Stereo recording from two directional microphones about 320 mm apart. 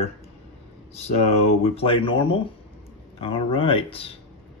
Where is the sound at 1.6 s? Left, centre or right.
Centre.